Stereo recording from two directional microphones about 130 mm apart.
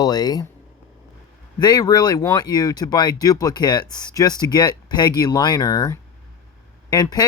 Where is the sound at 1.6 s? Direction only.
30° left (ahead or behind).